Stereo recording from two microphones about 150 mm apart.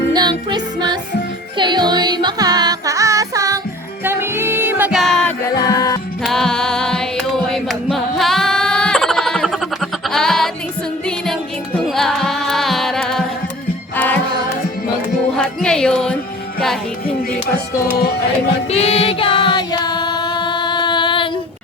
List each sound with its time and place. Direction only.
0.1 s music: 30° right (ahead or behind)
4.9 s music: centre (ahead or behind)
5.6 s music: 25° left (ahead or behind)
6.2 s music: 5° left (ahead or behind)
11.0 s carnatic music: 5° left (ahead or behind)
13.9 s music: 10° left (ahead or behind)
15.4 s music: 5° left (ahead or behind)
17.8 s music: 90° left
18.7 s singing: 45° left (ahead or behind)